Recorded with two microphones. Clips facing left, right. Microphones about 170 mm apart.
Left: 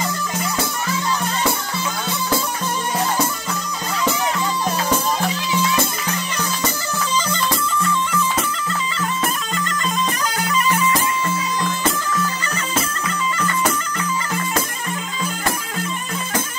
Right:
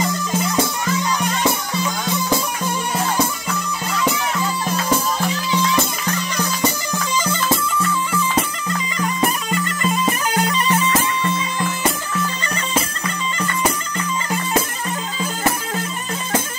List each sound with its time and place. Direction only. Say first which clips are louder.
6.3 s music: right 4 dB; 15° right (ahead or behind)
8.1 s music: right 1 dB; 10° right (ahead or behind)
8.9 s bagpipes: right 5 dB; 15° right (ahead or behind)
10.4 s music: even; 30° right (ahead or behind)